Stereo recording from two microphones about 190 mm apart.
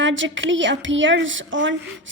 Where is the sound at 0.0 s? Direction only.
80° right.